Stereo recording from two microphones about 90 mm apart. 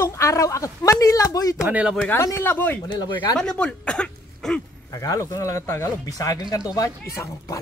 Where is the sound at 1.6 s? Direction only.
10° right (ahead or behind).